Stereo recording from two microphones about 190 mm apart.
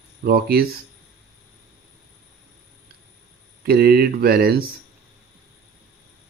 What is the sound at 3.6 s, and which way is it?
Speech, 55° right (ahead or behind).